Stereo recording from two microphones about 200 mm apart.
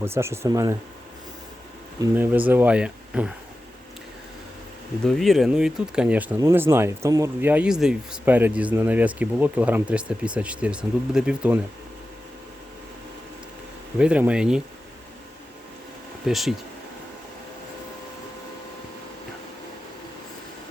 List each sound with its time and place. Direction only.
0.0 s speech: 10° right (ahead or behind)
2.0 s speech: 10° right (ahead or behind)
5.0 s speech: centre (ahead or behind)
14.0 s speech: 5° right (ahead or behind)
16.2 s speech: centre (ahead or behind)